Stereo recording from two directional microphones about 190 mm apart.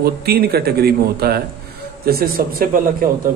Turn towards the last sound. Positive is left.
turn(degrees=-50)  # may be behind; listen again after turning